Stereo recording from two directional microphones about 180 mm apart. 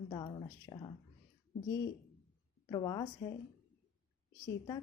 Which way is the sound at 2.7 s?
25° left (ahead or behind).